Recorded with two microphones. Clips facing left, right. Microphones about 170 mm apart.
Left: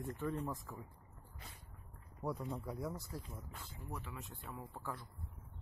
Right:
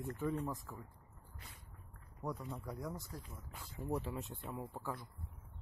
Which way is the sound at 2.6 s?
5° left (ahead or behind).